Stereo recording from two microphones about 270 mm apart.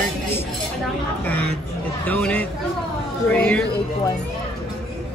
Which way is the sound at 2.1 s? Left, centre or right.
Centre.